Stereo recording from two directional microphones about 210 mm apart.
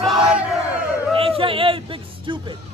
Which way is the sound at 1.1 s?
25° right (ahead or behind).